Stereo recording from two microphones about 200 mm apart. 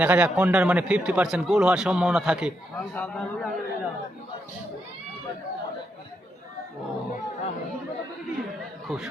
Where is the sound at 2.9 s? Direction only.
10° left (ahead or behind).